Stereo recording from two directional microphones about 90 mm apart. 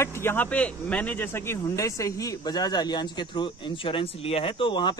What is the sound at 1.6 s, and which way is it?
A man's voice, 35° left (ahead or behind).